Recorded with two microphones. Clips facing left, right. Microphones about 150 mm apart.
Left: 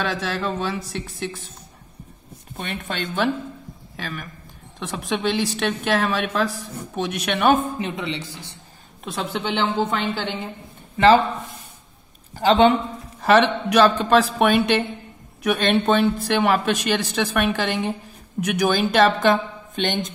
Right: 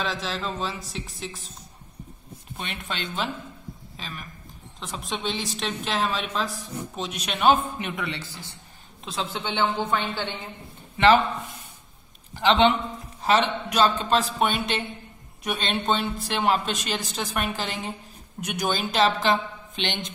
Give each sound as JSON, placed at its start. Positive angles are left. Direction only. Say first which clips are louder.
{"t": 0.0, "sound": "a woman's voice", "louder": "left 4 dB", "side_deg": 60}
{"t": 2.5, "sound": "speech", "louder": "left 5 dB", "side_deg": 50}
{"t": 3.9, "sound": "a woman's voice", "louder": "left 9 dB", "side_deg": 65}
{"t": 7.8, "sound": "speech", "louder": "left 4 dB", "side_deg": 25}
{"t": 9.0, "sound": "a woman's voice", "louder": "left 4 dB", "side_deg": 60}
{"t": 12.4, "sound": "a man's voice", "louder": "left 4 dB", "side_deg": 40}
{"t": 13.2, "sound": "a man's voice", "louder": "left 6 dB", "side_deg": 65}